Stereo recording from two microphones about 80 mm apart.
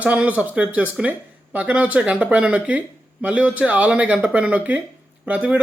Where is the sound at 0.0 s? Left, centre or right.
Centre.